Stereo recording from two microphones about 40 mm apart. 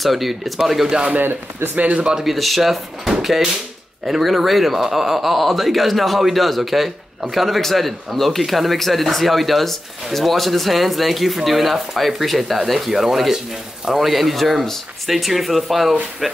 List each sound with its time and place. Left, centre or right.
0.0 s a man's voice: centre
2.2 s a man's voice: centre